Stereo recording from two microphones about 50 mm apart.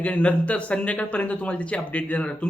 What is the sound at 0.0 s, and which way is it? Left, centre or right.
A man's voice, left.